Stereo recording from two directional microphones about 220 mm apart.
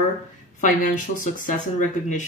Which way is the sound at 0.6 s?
35° left (ahead or behind).